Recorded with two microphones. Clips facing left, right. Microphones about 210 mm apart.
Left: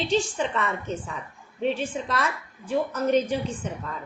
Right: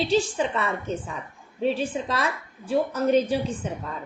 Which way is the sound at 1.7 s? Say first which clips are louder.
Right 2 dB; 10° right (ahead or behind).